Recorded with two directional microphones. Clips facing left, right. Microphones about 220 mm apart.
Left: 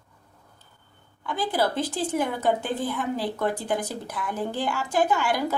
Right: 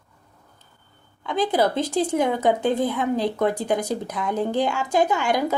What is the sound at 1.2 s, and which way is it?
A woman's voice, 25° right (ahead or behind).